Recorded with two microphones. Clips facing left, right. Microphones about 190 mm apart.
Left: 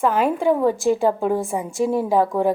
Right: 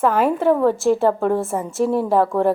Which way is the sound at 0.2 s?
5° right (ahead or behind).